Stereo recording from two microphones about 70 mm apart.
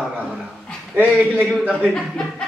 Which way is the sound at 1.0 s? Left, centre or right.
Right.